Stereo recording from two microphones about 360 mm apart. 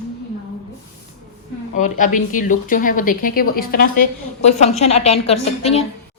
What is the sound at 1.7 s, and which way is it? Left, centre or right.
A woman's voice, left.